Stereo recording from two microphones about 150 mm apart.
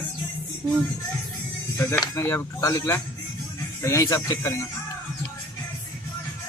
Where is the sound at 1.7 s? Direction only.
20° left (ahead or behind).